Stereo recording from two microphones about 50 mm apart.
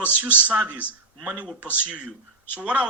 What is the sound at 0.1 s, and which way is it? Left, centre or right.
Speech, right.